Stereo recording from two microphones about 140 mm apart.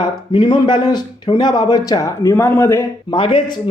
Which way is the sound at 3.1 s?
35° left (ahead or behind).